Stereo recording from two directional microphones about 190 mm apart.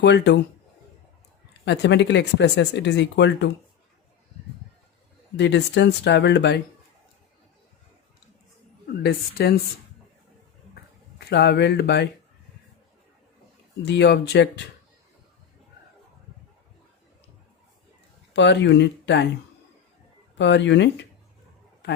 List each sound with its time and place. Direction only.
0.0 s speech: 65° left (ahead or behind)
1.6 s speech: 65° left (ahead or behind)
5.4 s speech: 65° left (ahead or behind)
8.9 s speech: 60° left (ahead or behind)
11.2 s speech: 60° left (ahead or behind)
13.8 s speech: 65° left (ahead or behind)
18.3 s speech: 65° left (ahead or behind)
20.4 s speech: 65° left (ahead or behind)